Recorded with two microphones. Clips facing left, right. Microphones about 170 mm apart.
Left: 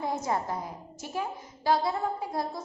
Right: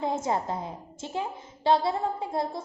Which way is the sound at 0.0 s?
20° right (ahead or behind).